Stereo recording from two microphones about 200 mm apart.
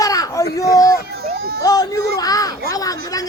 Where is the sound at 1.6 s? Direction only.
20° left (ahead or behind).